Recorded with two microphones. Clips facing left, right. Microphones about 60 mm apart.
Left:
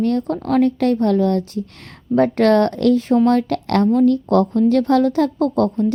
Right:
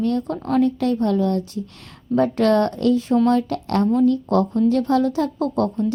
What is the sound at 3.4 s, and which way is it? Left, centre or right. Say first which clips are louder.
A woman's voice: left 3 dB; left.